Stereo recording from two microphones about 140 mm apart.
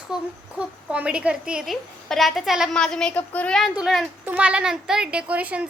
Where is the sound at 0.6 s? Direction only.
10° right (ahead or behind); by 3.6 s 10° left (ahead or behind).